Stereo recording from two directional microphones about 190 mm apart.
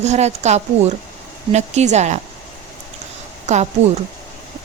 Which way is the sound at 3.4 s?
35° right (ahead or behind).